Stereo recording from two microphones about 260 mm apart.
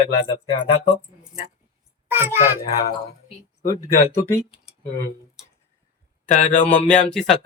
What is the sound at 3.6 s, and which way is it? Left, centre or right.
Speech, centre.